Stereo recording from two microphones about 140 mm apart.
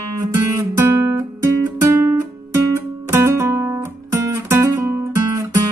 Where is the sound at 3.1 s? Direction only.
20° right (ahead or behind).